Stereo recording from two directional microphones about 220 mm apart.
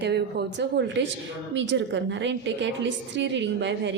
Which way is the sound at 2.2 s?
55° right (ahead or behind).